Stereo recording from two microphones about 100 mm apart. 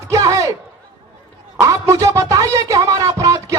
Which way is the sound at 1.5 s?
30° right (ahead or behind).